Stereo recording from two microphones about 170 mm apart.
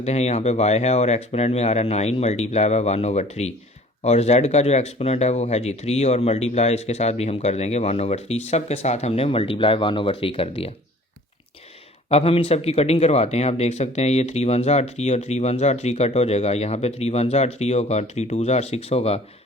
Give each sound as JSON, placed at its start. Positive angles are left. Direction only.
{"t": 0.0, "sound": "speech", "side_deg": 40}
{"t": 12.0, "sound": "speech", "side_deg": 35}